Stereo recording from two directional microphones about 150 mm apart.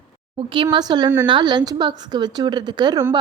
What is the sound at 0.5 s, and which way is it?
A woman's voice, 30° right (ahead or behind).